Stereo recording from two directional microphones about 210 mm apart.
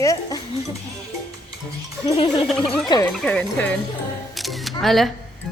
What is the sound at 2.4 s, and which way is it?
A woman's voice, centre (ahead or behind).